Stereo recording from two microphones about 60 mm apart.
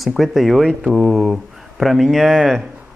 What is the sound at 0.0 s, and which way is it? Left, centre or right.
Speech, centre.